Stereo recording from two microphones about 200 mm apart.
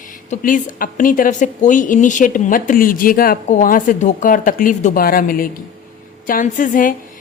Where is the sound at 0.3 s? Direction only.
40° left (ahead or behind).